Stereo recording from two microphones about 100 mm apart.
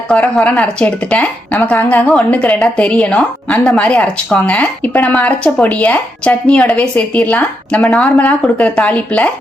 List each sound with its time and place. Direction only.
0.1 s a woman's voice: 10° left (ahead or behind)